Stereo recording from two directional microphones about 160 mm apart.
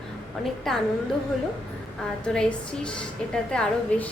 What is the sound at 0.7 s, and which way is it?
Speech, centre (ahead or behind).